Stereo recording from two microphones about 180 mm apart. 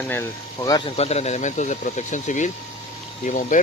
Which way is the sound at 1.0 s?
35° left (ahead or behind).